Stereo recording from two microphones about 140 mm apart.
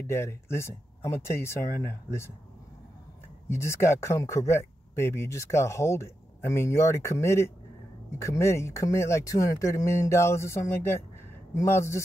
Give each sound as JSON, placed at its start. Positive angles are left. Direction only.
{"t": 0.0, "sound": "speech", "side_deg": 20}
{"t": 3.4, "sound": "speech", "side_deg": 20}